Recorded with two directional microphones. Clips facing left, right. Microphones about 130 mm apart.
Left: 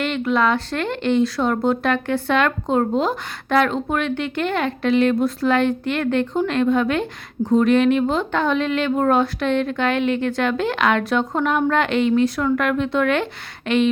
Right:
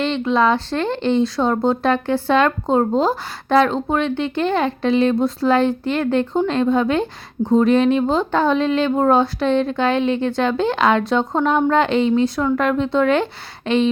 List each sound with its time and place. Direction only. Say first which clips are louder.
0.0 s speech: right 2 dB; 30° right (ahead or behind)